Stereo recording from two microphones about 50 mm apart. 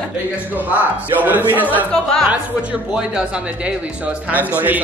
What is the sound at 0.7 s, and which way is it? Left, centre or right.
Speech, right.